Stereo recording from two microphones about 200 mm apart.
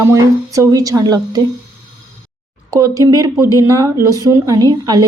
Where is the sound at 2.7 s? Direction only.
15° right (ahead or behind).